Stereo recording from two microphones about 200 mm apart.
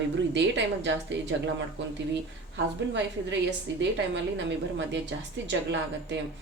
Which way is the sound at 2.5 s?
65° right (ahead or behind).